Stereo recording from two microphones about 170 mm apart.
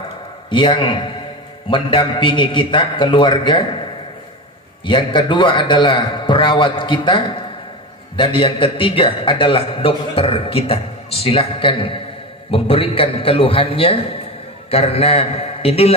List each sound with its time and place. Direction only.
0.5 s a man's voice: 30° left (ahead or behind)
4.8 s a man's voice: 30° left (ahead or behind)